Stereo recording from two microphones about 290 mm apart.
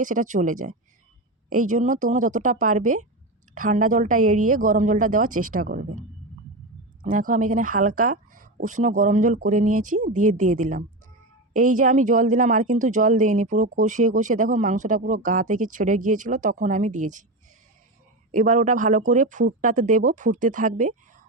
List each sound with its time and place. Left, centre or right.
0.0 s speech: right
18.3 s speech: right